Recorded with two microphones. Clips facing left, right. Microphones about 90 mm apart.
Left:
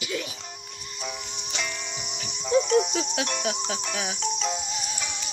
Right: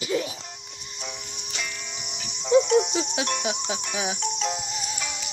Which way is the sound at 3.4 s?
15° right (ahead or behind).